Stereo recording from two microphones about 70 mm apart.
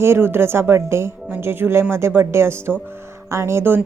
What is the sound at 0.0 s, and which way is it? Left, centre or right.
A woman's voice, right.